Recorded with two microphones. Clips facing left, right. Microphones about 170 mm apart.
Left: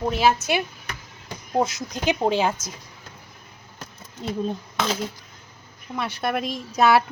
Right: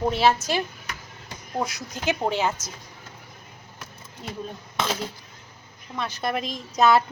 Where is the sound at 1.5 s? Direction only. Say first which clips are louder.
Left 6 dB; 20° left (ahead or behind).